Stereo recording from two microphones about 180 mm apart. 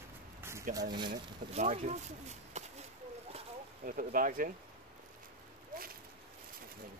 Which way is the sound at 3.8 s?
50° right (ahead or behind).